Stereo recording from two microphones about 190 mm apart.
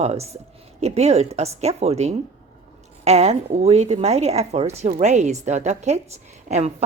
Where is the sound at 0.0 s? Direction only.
35° right (ahead or behind).